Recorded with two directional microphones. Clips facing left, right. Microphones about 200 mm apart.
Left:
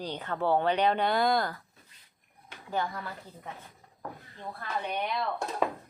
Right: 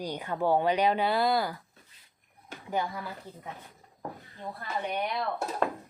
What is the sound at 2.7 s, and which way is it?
Speech, 10° right (ahead or behind).